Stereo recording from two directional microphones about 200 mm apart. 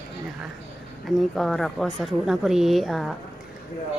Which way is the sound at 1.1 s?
Centre (ahead or behind).